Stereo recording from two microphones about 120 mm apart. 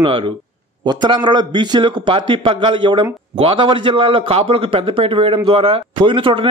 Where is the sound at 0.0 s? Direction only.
50° right (ahead or behind).